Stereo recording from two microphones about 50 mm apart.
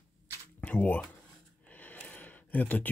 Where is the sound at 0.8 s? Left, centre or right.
Left.